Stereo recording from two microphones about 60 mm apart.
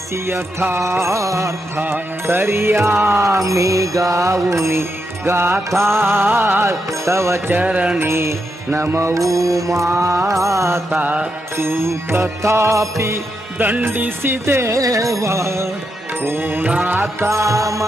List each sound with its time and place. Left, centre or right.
0.3 s music: right
0.8 s music: right
1.8 s music: right
3.2 s music: right
7.5 s music: right
7.9 s music: right
11.0 s music: right
11.5 s music: right
13.6 s music: right
14.8 s music: right
15.2 s music: right
16.2 s music: right
17.2 s music: right